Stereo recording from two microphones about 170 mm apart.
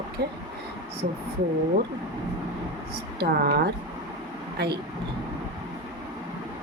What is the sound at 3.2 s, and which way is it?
A woman's voice, 75° right (ahead or behind).